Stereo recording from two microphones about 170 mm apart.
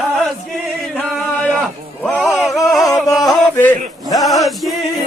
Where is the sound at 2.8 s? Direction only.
20° left (ahead or behind).